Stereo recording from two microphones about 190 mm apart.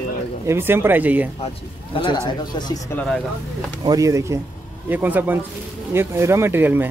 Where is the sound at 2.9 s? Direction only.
5° left (ahead or behind).